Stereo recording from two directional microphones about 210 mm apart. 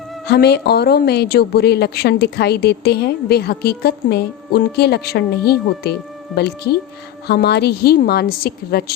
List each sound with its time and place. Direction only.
0.3 s a woman's voice: 50° left (ahead or behind)